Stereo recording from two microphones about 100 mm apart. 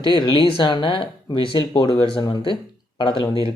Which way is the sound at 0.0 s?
50° left (ahead or behind).